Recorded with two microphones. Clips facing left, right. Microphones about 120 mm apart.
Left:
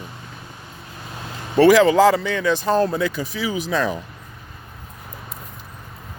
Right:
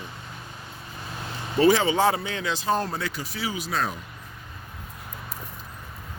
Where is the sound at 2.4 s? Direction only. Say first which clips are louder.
Left 9 dB; 55° left (ahead or behind).